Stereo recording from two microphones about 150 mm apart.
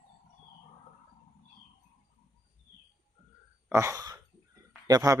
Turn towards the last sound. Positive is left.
turn(degrees=-25)  # may be behind; listen again after turning